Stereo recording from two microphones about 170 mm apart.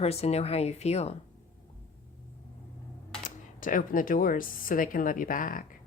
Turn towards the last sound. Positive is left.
turn(degrees=55)  # may be behind; listen again after turning